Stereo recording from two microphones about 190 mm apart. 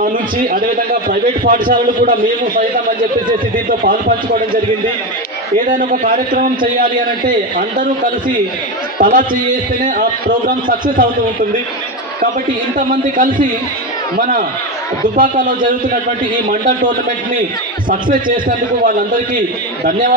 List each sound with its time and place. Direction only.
0.0 s a man's voice: 45° right (ahead or behind)
5.7 s a man's voice: 45° right (ahead or behind)
8.9 s a man's voice: 45° right (ahead or behind)
12.7 s a man's voice: 45° right (ahead or behind)